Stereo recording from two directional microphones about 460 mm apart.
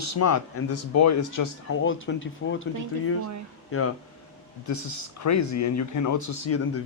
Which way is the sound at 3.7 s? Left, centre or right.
Left.